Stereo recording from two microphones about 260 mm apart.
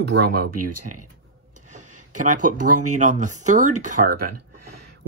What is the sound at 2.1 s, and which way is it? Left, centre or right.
Speech, right.